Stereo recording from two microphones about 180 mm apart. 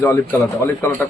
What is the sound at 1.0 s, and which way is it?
Speech, 15° left (ahead or behind).